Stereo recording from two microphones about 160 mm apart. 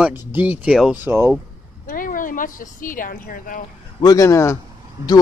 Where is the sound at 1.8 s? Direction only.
60° left (ahead or behind).